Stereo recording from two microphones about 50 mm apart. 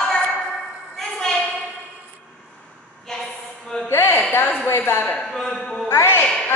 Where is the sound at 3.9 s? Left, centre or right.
Left.